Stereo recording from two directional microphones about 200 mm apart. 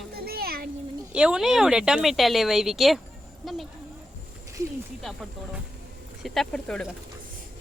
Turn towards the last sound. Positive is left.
turn(degrees=5)  # may be behind; listen again after turning